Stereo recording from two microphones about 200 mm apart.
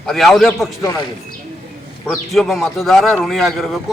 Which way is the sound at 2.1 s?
Centre (ahead or behind).